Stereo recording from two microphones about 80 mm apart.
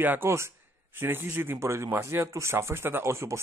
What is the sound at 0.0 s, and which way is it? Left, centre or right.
Speech, right.